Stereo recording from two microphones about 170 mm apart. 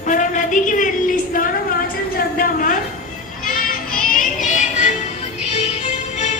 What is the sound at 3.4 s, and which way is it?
Child singing, 55° left (ahead or behind).